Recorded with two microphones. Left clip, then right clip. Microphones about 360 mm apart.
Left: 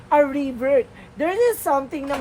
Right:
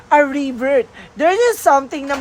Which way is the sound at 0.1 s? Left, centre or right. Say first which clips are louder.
Right 4 dB; right.